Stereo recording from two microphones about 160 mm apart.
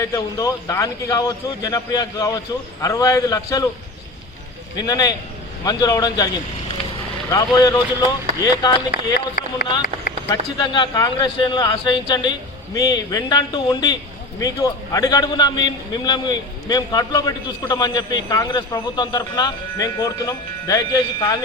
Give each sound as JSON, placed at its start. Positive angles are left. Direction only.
{"t": 0.0, "sound": "speech", "side_deg": 20}
{"t": 4.8, "sound": "speech", "side_deg": 25}
{"t": 7.3, "sound": "speech", "side_deg": 20}
{"t": 8.9, "sound": "speech", "side_deg": 75}
{"t": 10.2, "sound": "speech", "side_deg": 25}